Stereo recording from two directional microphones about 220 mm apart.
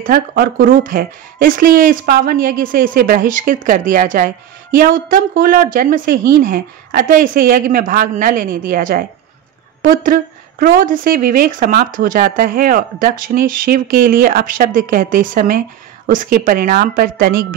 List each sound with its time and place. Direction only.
0.0 s speech: 40° right (ahead or behind)